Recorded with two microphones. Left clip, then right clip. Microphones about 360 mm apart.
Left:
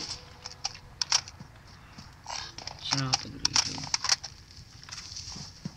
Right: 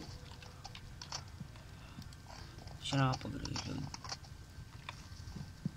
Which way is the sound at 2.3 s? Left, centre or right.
Left.